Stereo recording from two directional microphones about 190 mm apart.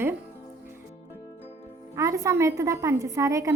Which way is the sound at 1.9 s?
15° right (ahead or behind).